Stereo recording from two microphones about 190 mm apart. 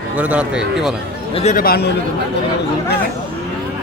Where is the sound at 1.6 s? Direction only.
55° left (ahead or behind).